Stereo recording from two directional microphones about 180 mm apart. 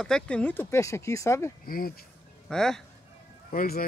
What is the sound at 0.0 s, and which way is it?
Speech, 5° left (ahead or behind).